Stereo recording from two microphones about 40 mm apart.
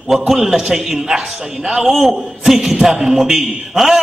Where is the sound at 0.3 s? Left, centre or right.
Centre.